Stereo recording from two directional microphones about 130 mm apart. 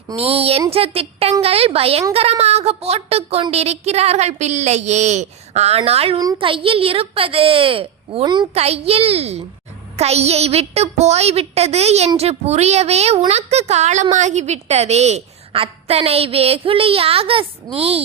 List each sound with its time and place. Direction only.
0.2 s a woman's voice: 50° right (ahead or behind)
8.2 s a woman's voice: 35° right (ahead or behind)
8.5 s a woman's voice: 50° right (ahead or behind)